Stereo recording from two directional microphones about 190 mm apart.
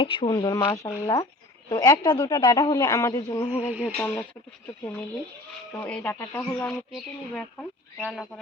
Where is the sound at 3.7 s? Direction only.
5° right (ahead or behind).